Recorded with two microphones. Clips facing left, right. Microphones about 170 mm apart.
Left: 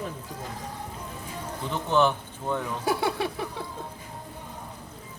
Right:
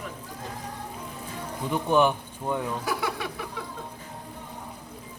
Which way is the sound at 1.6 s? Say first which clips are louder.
Right 1 dB; 15° right (ahead or behind).